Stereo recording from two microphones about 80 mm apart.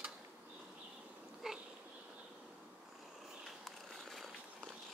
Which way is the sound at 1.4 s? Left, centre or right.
Centre.